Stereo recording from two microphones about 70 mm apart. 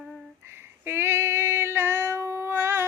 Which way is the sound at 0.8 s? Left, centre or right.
Right.